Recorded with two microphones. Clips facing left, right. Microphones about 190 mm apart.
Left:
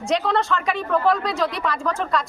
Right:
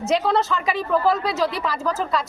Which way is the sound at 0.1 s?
5° right (ahead or behind).